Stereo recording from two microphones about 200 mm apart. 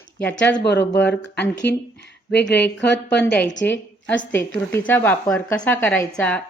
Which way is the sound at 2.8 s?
60° left (ahead or behind).